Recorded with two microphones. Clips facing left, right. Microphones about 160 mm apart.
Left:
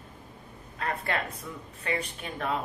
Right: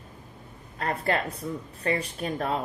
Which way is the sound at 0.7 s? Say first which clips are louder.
Right 4 dB; 35° right (ahead or behind).